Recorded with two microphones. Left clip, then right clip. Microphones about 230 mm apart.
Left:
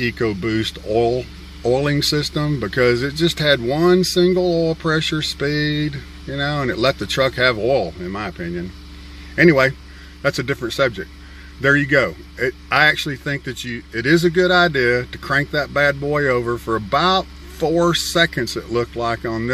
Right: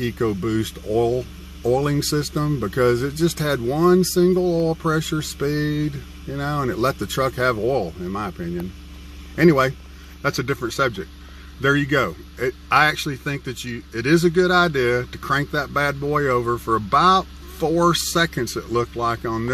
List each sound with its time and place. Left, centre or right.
0.0 s speech: centre